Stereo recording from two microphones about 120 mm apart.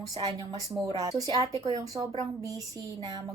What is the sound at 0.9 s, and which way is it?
A woman's voice, 30° right (ahead or behind).